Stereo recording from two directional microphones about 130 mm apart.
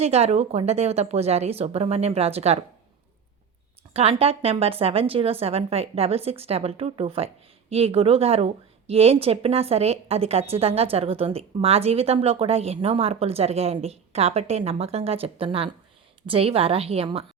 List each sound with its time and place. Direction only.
0.0 s a woman's voice: 55° right (ahead or behind)
3.9 s a woman's voice: 50° right (ahead or behind)